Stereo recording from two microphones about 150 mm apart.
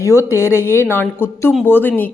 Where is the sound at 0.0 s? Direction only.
20° left (ahead or behind).